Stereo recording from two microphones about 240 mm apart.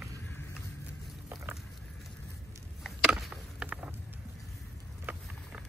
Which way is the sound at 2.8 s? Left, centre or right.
Centre.